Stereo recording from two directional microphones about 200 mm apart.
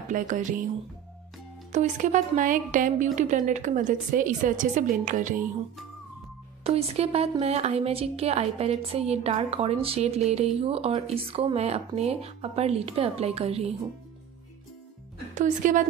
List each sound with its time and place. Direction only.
0.1 s a woman's voice: 40° right (ahead or behind)
1.7 s a woman's voice: 35° right (ahead or behind)
6.6 s a woman's voice: 30° right (ahead or behind)
15.3 s a woman's voice: 40° right (ahead or behind)